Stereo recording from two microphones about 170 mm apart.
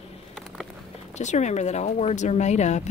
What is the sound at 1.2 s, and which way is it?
Speech, 45° left (ahead or behind).